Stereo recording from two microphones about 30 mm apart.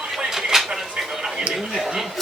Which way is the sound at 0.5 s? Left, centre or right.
Centre.